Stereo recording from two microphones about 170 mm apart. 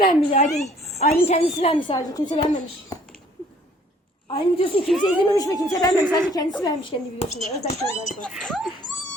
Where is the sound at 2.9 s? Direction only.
25° left (ahead or behind).